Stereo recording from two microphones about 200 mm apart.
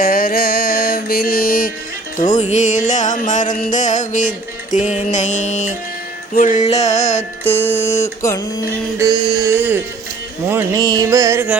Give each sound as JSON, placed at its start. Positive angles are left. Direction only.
{"t": 0.0, "sound": "music", "side_deg": 45}
{"t": 2.4, "sound": "music", "side_deg": 35}
{"t": 7.6, "sound": "a sound", "side_deg": 10}
{"t": 7.9, "sound": "music", "side_deg": 35}
{"t": 8.2, "sound": "a sound", "side_deg": 15}
{"t": 9.0, "sound": "carnatic music", "side_deg": -20}